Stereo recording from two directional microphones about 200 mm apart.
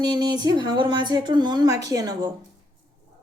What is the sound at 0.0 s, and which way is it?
Speech, 20° right (ahead or behind).